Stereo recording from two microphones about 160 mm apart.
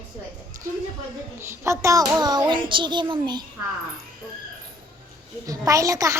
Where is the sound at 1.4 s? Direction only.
15° right (ahead or behind).